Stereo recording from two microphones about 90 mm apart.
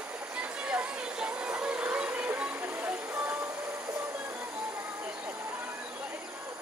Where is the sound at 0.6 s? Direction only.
10° right (ahead or behind).